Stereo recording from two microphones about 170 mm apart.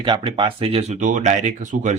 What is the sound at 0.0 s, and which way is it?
Speech, 30° right (ahead or behind).